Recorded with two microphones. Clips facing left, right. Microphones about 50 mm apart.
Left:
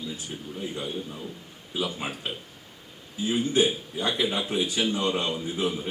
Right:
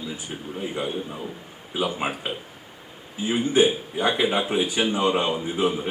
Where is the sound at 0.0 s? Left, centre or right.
Centre.